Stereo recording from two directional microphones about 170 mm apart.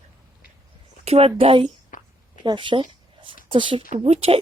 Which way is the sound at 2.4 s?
30° right (ahead or behind).